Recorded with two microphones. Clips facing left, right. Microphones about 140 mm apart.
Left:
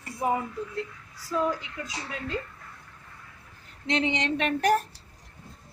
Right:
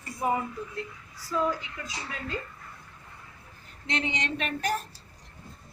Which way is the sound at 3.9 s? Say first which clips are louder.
Left 5 dB; 90° left.